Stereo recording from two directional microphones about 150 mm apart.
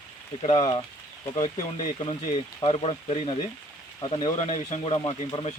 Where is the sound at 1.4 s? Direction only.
55° left (ahead or behind).